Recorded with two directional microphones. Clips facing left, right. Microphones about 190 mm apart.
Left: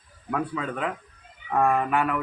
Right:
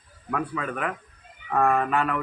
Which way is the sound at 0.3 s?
20° left (ahead or behind).